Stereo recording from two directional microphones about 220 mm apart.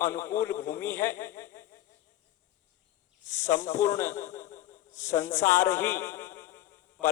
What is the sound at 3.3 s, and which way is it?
A man's voice, 10° left (ahead or behind).